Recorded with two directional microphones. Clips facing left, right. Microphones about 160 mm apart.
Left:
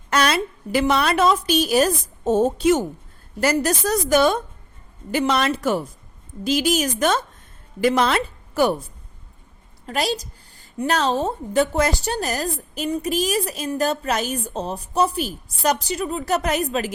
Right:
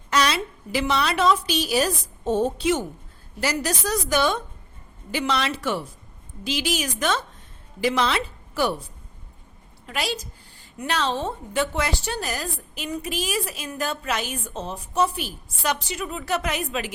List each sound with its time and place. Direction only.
0.1 s a woman's voice: 55° left (ahead or behind)
9.8 s a woman's voice: 40° left (ahead or behind)